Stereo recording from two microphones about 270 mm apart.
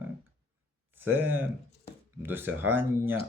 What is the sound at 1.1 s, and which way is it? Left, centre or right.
Speech, centre.